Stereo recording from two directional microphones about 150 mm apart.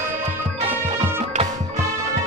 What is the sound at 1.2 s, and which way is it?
Music, 45° right (ahead or behind).